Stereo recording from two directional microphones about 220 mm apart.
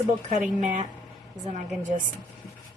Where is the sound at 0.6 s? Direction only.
35° right (ahead or behind).